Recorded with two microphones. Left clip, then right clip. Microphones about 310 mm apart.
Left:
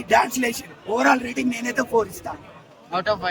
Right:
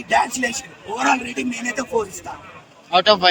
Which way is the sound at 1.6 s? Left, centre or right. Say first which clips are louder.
Left 1 dB; centre.